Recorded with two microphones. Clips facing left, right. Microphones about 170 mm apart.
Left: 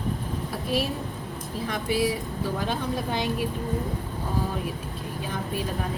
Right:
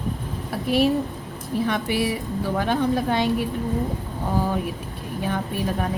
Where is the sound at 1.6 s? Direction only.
65° right (ahead or behind).